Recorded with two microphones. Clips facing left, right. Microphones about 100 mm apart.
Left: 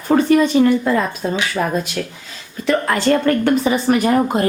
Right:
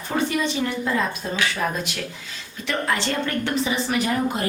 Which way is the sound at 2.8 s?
50° left (ahead or behind).